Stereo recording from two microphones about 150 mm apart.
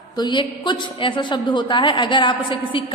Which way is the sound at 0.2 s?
30° left (ahead or behind).